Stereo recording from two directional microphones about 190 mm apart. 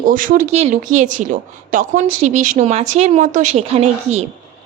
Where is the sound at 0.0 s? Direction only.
45° right (ahead or behind).